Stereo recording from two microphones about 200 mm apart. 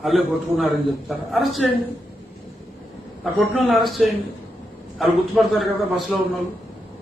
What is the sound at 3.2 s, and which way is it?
A man's voice, centre (ahead or behind).